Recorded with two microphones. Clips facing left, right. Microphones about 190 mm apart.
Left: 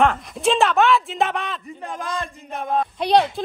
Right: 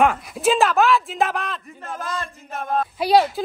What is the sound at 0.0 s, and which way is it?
Speech, 5° right (ahead or behind).